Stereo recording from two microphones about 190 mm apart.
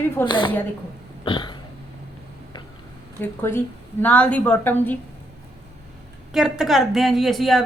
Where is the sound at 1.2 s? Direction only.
25° left (ahead or behind).